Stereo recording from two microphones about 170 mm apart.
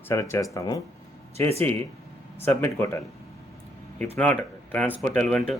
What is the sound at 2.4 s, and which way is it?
Speech, 15° left (ahead or behind).